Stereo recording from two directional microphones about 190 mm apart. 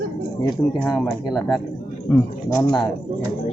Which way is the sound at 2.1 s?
10° left (ahead or behind).